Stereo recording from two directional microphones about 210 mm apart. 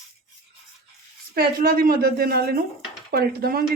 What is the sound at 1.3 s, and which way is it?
A woman's voice, 45° right (ahead or behind).